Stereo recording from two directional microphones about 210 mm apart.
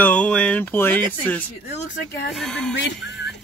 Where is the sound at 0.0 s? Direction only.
5° left (ahead or behind).